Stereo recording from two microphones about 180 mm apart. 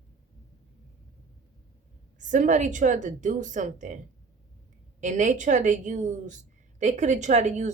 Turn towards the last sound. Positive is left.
turn(degrees=-40)  # may be behind; listen again after turning